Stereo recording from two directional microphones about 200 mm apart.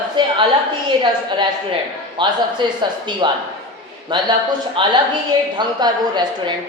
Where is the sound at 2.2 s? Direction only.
25° right (ahead or behind).